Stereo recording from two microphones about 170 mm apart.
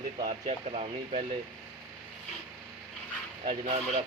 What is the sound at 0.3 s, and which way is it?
Speech, 40° right (ahead or behind).